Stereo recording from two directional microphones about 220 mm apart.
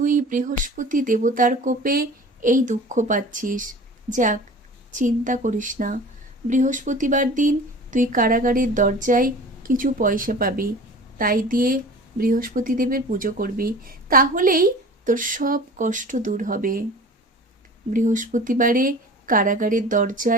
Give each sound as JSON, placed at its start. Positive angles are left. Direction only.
{"t": 0.0, "sound": "a woman's voice", "side_deg": -35}
{"t": 17.9, "sound": "a woman's voice", "side_deg": -35}